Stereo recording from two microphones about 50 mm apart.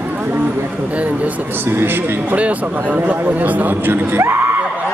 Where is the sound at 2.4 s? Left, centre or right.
Right.